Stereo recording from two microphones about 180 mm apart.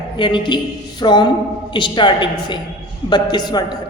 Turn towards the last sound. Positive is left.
turn(degrees=25)  # may be behind; listen again after turning